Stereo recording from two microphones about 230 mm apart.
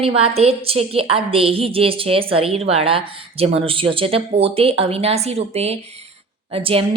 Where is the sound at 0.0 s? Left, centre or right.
Right.